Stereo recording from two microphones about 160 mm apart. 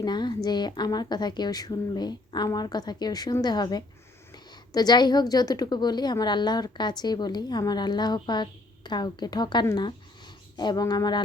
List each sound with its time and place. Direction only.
0.0 s a woman's voice: 25° left (ahead or behind)